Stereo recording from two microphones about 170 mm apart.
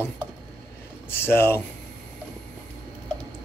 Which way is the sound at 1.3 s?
15° left (ahead or behind).